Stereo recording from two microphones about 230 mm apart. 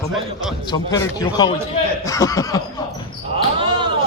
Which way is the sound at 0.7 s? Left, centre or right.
Centre.